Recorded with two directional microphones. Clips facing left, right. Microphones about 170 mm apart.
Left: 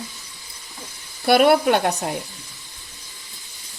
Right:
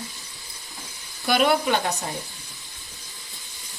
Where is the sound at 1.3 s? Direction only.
60° left (ahead or behind).